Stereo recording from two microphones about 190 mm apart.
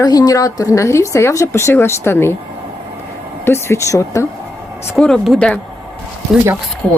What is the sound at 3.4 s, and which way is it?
Speech, 15° left (ahead or behind).